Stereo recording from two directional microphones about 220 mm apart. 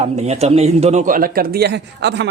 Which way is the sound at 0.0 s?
30° right (ahead or behind).